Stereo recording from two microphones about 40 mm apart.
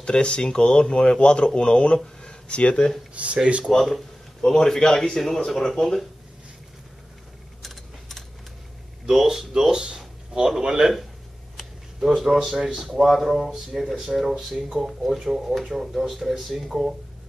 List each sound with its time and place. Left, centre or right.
0.0 s speech: left
2.2 s a sound: left
3.2 s speech: right
3.7 s a man's voice: left
9.0 s speech: centre
12.2 s speech: centre